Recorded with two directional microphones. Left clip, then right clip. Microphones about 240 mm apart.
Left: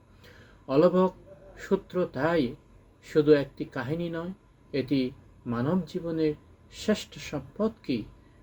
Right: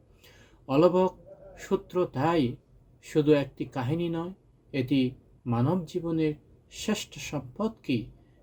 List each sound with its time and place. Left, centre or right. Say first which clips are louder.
0.7 s speech: even; centre